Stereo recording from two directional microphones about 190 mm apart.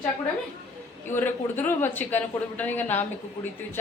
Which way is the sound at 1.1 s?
10° left (ahead or behind).